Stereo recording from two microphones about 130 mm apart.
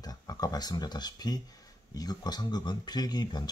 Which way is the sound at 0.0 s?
30° left (ahead or behind).